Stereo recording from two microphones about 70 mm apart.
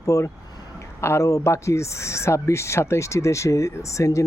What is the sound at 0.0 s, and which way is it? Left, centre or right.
Speech, left.